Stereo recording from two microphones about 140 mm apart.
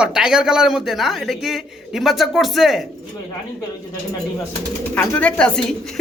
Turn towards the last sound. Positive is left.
turn(degrees=5)  # may be behind; listen again after turning